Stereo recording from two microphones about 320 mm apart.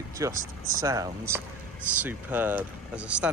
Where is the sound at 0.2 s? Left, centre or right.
Centre.